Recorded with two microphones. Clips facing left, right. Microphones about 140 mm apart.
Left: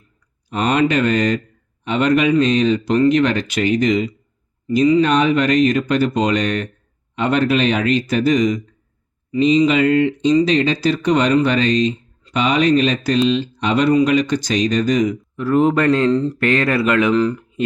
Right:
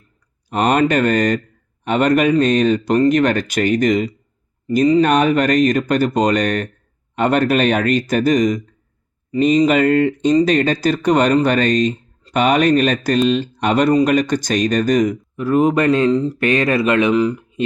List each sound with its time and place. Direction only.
0.5 s speech: 45° right (ahead or behind)
15.4 s speech: 20° right (ahead or behind)
16.1 s speech: 5° right (ahead or behind)
16.4 s speech: 20° right (ahead or behind)